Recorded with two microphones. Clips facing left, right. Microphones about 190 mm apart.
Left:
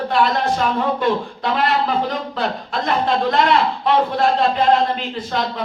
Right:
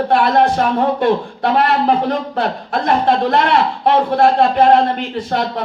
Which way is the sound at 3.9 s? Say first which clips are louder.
Right 5 dB; 55° right (ahead or behind).